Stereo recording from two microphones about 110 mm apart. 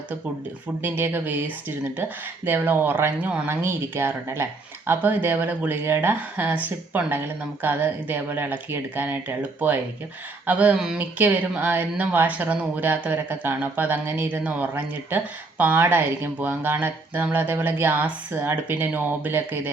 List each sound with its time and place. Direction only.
0.8 s speech: 20° right (ahead or behind)